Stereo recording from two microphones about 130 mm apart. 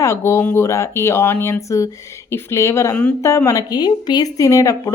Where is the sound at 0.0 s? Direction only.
20° left (ahead or behind).